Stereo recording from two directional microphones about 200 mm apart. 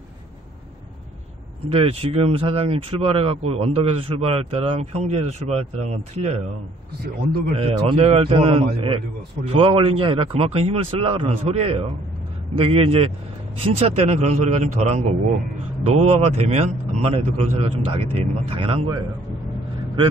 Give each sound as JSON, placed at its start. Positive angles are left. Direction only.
{"t": 1.7, "sound": "speech", "side_deg": -30}
{"t": 7.5, "sound": "a man's voice", "side_deg": -30}